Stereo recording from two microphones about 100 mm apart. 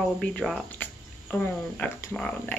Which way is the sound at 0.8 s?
15° left (ahead or behind).